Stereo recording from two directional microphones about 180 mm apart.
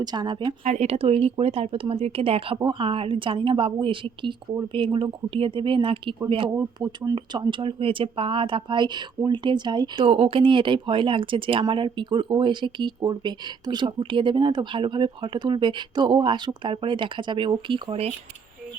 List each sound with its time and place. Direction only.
0.0 s speech: 25° right (ahead or behind)
0.6 s speech: 40° right (ahead or behind)